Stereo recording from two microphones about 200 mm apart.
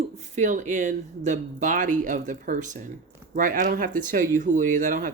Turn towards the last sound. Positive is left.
turn(degrees=-40)  # may be behind; listen again after turning